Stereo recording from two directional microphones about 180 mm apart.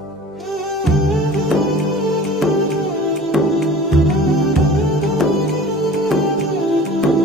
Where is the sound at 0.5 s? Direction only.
Centre (ahead or behind).